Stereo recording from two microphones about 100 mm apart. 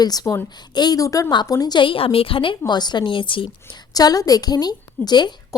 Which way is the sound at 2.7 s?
45° left (ahead or behind).